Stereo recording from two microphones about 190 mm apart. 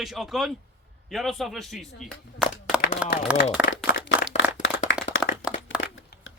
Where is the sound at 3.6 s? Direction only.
5° right (ahead or behind).